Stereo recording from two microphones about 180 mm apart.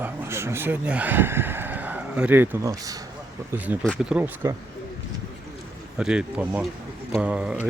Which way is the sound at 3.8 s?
5° right (ahead or behind).